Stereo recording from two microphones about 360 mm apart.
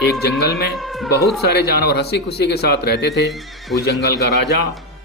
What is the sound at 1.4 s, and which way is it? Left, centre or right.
Speech, left.